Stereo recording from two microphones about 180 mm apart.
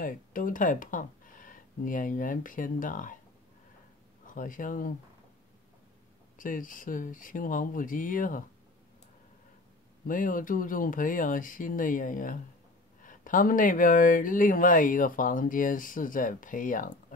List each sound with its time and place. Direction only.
0.0 s speech: 50° left (ahead or behind)
4.3 s speech: 45° left (ahead or behind)
6.3 s speech: 50° left (ahead or behind)
10.0 s speech: 50° left (ahead or behind)